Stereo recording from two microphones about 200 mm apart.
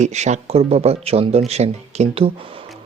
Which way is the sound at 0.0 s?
35° right (ahead or behind).